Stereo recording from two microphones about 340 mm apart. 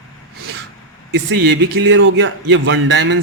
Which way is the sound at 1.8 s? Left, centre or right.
Right.